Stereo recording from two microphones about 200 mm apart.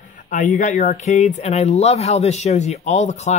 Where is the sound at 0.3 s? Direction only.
40° left (ahead or behind).